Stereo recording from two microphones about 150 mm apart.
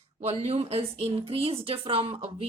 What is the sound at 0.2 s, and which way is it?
A man's voice, 45° right (ahead or behind).